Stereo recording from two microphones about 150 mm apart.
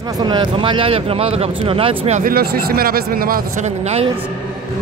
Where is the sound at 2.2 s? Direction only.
85° right.